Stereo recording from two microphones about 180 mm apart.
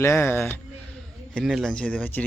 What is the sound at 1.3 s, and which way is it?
Speech, centre (ahead or behind).